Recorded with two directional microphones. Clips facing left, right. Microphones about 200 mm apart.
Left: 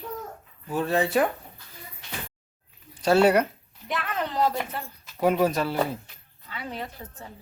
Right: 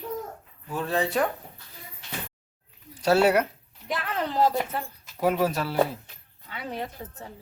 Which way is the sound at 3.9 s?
30° right (ahead or behind).